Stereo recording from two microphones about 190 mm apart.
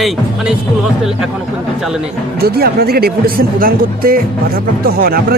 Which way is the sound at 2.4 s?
55° right (ahead or behind).